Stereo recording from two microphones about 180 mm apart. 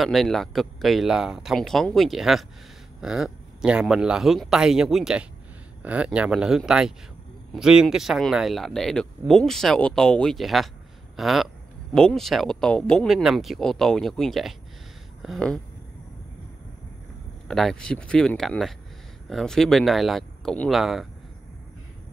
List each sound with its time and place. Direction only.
0.0 s speech: centre (ahead or behind)
17.5 s speech: 5° left (ahead or behind)